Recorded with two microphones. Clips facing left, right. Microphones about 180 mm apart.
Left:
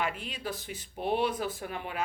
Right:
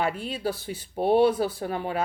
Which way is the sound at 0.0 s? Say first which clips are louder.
Right 7 dB; 35° right (ahead or behind).